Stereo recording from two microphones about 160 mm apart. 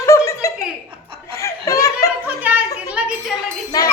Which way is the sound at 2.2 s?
10° right (ahead or behind).